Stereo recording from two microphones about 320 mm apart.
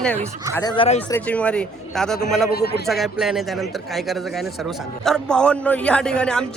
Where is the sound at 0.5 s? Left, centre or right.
Centre.